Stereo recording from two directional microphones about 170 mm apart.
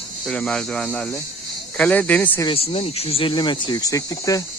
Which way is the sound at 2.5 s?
35° left (ahead or behind).